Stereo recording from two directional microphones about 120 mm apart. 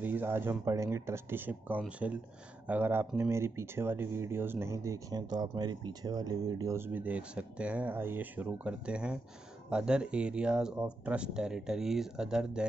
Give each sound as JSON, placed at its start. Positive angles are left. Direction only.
{"t": 0.0, "sound": "speech", "side_deg": -15}